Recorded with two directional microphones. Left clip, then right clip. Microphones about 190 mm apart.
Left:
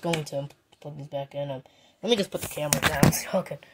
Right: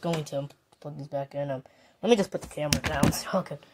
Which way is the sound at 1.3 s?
40° right (ahead or behind).